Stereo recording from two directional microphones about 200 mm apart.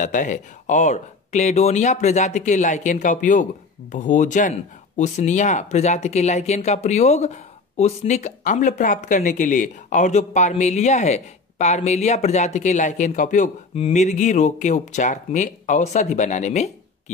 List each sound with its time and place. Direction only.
0.0 s speech: 40° left (ahead or behind)